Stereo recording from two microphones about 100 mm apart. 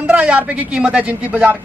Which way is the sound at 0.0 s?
10° right (ahead or behind).